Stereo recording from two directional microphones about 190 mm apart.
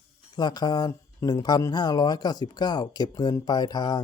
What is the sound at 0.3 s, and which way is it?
Speech, 20° left (ahead or behind).